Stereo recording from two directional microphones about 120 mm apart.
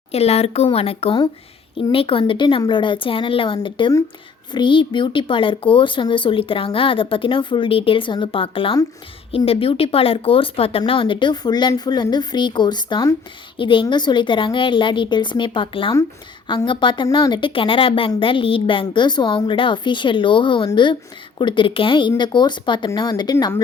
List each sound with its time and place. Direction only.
0.1 s speech: 60° left (ahead or behind); by 23.5 s 35° left (ahead or behind)